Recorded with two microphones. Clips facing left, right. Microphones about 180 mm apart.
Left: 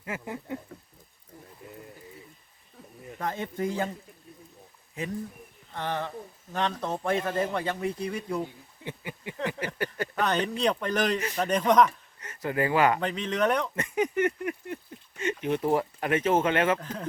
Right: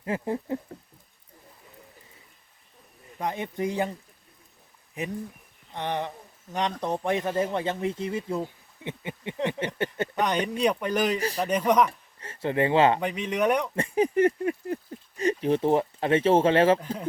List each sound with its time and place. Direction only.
0.0 s speech: 30° right (ahead or behind)
1.6 s bird: 85° left
3.2 s speech: 20° right (ahead or behind)
5.0 s a man's voice: 20° right (ahead or behind)
11.9 s speech: 30° right (ahead or behind)
13.0 s speech: 10° right (ahead or behind)
13.7 s a sound: 30° right (ahead or behind)
15.2 s speech: 35° right (ahead or behind)